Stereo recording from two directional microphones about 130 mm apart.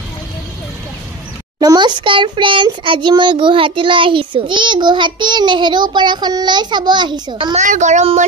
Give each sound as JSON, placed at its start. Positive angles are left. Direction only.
{"t": 1.6, "sound": "a child's voice", "side_deg": -35}
{"t": 7.5, "sound": "speech", "side_deg": -70}